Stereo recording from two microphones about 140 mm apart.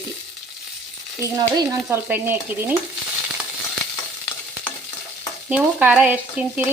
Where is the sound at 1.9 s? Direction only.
15° right (ahead or behind).